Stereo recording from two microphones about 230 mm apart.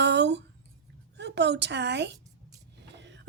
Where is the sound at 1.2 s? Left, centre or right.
Right.